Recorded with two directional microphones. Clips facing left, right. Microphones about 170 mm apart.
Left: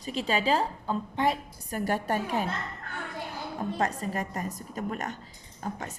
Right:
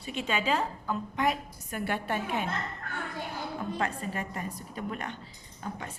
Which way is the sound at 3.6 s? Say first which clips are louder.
Left 4 dB; 40° left (ahead or behind).